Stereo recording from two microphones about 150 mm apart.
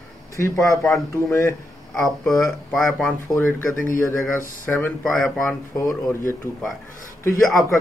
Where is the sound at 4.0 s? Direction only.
20° left (ahead or behind).